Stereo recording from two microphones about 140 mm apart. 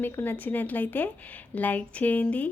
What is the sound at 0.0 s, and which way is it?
A woman's voice, 15° left (ahead or behind).